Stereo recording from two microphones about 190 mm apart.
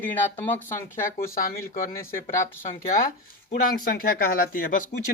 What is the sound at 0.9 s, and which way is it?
Speech, 45° left (ahead or behind).